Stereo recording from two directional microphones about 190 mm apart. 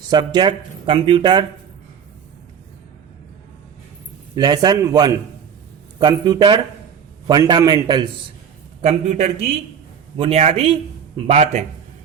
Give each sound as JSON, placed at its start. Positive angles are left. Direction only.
{"t": 0.1, "sound": "speech", "side_deg": -25}
{"t": 4.4, "sound": "speech", "side_deg": -20}
{"t": 8.8, "sound": "a man's voice", "side_deg": -35}